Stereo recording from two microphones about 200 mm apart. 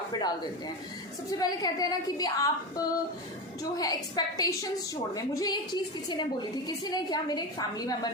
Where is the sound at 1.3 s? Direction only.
20° left (ahead or behind).